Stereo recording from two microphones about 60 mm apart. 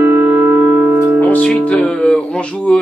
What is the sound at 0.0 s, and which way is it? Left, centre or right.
Music, right.